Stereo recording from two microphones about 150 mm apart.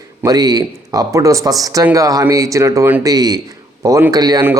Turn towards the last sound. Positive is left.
turn(degrees=-25)  # may be behind; listen again after turning